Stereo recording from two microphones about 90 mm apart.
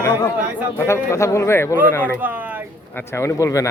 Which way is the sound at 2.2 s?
20° right (ahead or behind).